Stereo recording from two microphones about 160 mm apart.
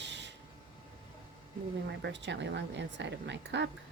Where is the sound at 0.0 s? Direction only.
90° right.